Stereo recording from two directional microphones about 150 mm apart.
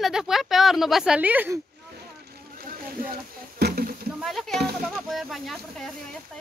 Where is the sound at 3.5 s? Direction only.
90° right.